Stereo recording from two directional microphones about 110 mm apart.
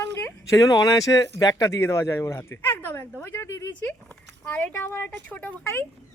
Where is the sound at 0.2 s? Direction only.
25° left (ahead or behind).